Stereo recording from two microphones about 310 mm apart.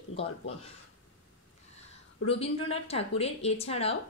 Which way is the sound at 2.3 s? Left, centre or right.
Centre.